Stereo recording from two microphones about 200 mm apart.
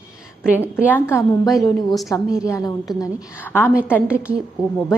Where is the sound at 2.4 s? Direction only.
15° left (ahead or behind).